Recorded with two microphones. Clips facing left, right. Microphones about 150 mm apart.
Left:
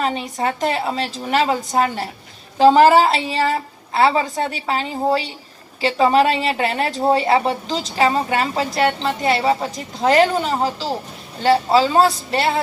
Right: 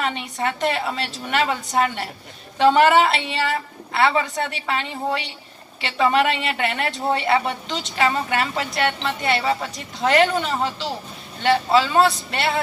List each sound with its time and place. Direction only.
0.0 s a woman's voice: 35° left (ahead or behind)